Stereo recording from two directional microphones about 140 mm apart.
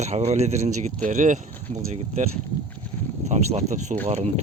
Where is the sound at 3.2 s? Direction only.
50° right (ahead or behind).